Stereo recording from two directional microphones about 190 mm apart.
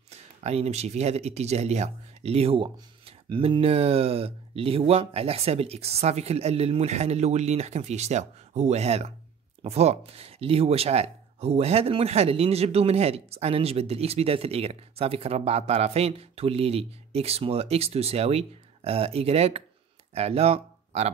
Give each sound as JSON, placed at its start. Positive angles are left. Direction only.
{"t": 0.1, "sound": "speech", "side_deg": -35}